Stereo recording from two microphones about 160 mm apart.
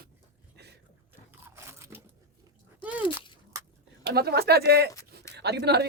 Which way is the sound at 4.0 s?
90° right.